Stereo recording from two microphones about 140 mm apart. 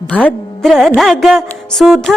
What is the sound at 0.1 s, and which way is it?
Speech, 10° left (ahead or behind).